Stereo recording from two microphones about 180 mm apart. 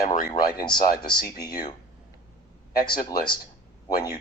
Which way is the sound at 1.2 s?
20° left (ahead or behind).